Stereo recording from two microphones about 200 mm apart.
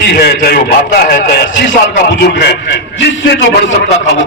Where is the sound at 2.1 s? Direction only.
55° left (ahead or behind).